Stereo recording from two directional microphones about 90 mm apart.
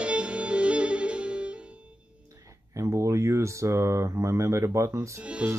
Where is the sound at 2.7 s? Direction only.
35° right (ahead or behind).